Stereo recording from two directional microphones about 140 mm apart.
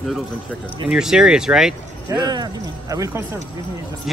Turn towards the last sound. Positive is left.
turn(degrees=-25)  # may be behind; listen again after turning